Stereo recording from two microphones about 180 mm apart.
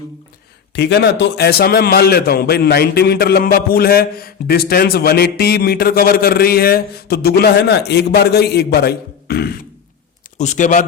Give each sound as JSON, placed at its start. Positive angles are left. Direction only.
{"t": 0.8, "sound": "a man's voice", "side_deg": 70}
{"t": 10.3, "sound": "a man's voice", "side_deg": 40}